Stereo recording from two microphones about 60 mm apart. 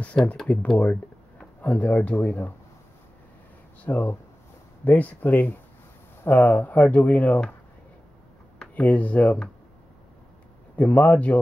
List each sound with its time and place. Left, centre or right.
0.2 s speech: centre
1.6 s speech: left
3.8 s speech: left
8.7 s speech: left
10.8 s speech: left